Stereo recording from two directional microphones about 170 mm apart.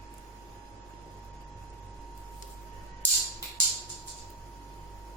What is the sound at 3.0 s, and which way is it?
Music, 10° left (ahead or behind).